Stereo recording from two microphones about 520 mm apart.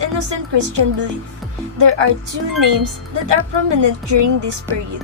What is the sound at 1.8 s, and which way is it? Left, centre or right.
Speech, right.